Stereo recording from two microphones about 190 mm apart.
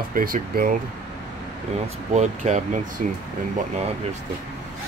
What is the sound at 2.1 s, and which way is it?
Speech, 40° right (ahead or behind).